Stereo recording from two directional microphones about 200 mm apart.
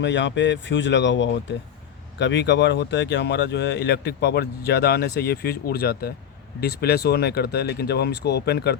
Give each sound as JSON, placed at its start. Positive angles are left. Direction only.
{"t": 0.0, "sound": "speech", "side_deg": 65}